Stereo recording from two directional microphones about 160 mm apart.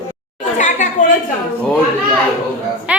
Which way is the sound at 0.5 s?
50° left (ahead or behind).